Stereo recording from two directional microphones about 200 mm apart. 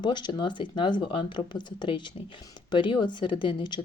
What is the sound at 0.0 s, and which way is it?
Speech, 20° left (ahead or behind).